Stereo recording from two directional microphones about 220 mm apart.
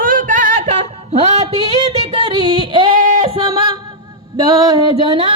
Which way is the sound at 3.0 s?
35° right (ahead or behind).